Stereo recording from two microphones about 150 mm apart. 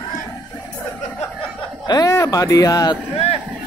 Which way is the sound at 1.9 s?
25° left (ahead or behind).